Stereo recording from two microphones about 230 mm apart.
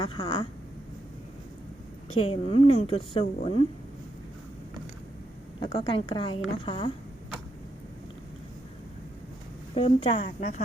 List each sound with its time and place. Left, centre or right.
0.0 s a woman's voice: left
2.2 s a woman's voice: left
5.5 s a woman's voice: left
9.7 s a woman's voice: left